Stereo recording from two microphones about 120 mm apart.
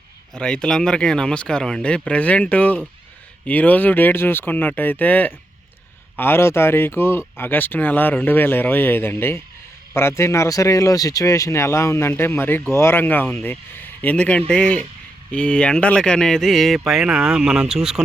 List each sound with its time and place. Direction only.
0.3 s speech: 5° left (ahead or behind)